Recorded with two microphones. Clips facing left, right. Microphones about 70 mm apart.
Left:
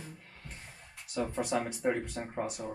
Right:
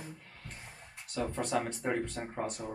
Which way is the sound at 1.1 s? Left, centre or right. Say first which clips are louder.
Left 1 dB; centre.